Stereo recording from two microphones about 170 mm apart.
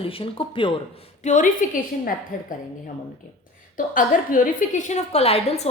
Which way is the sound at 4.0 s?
50° left (ahead or behind).